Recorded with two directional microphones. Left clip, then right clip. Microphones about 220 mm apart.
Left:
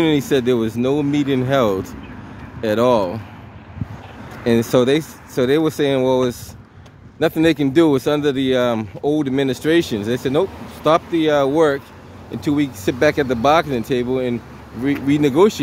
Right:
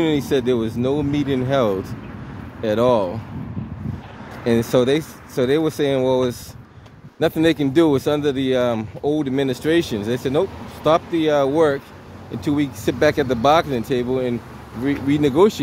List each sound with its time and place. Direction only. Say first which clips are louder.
0.0 s speech: left 2 dB; 15° left (ahead or behind)
4.5 s speech: left 2 dB; 20° left (ahead or behind)